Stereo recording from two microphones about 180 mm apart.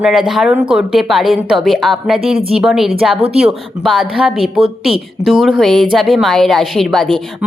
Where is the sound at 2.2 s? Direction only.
30° right (ahead or behind).